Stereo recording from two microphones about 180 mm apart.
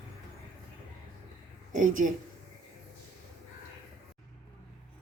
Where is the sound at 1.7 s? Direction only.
45° right (ahead or behind).